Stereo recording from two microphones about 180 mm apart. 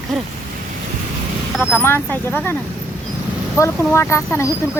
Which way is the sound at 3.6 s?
15° left (ahead or behind).